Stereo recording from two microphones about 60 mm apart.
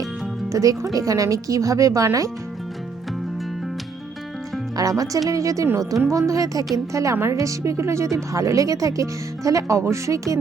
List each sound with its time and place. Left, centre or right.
0.5 s a woman's voice: right
4.8 s speech: right
5.3 s a woman's voice: right
5.7 s a woman's voice: right
6.1 s a woman's voice: right